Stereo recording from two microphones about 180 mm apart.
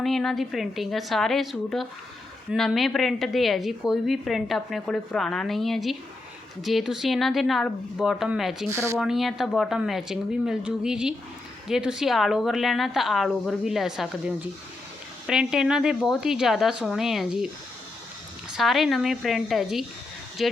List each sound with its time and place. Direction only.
0.0 s a woman's voice: centre (ahead or behind)
8.7 s speech: 15° right (ahead or behind)
9.0 s a woman's voice: centre (ahead or behind)
18.5 s a woman's voice: centre (ahead or behind)